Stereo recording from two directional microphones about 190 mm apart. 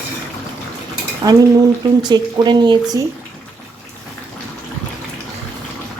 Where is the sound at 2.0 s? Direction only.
25° right (ahead or behind).